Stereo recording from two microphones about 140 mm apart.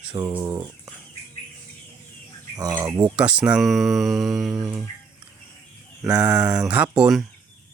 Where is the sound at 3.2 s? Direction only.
5° right (ahead or behind).